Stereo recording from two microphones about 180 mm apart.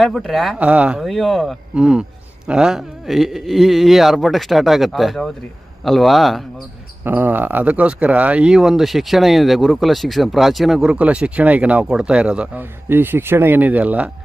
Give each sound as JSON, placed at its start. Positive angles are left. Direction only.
{"t": 0.0, "sound": "speech", "side_deg": 0}